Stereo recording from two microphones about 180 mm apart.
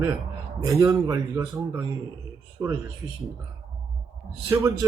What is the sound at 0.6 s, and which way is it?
Speech, 20° right (ahead or behind).